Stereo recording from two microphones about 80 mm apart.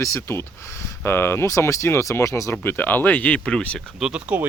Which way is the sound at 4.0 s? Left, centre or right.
Centre.